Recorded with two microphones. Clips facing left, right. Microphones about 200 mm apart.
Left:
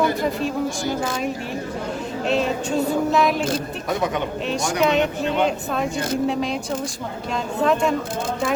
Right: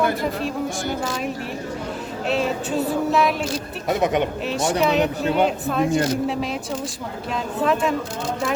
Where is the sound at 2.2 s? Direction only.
5° right (ahead or behind).